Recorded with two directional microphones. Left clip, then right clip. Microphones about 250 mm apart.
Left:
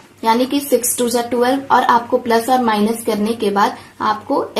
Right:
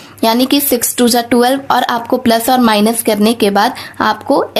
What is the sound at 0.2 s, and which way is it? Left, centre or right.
Speech, right.